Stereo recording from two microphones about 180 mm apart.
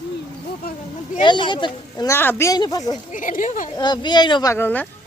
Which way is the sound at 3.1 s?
45° left (ahead or behind).